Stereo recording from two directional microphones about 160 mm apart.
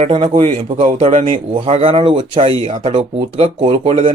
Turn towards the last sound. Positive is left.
turn(degrees=-35)  # may be behind; listen again after turning